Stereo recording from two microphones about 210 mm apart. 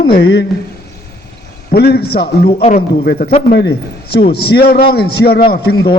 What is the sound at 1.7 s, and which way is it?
Speech, 50° left (ahead or behind).